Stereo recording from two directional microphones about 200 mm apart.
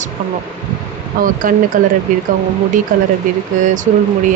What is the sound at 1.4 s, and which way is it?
Speech, 40° right (ahead or behind).